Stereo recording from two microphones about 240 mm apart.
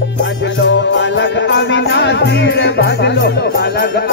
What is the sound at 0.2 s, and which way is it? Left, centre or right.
Music, left.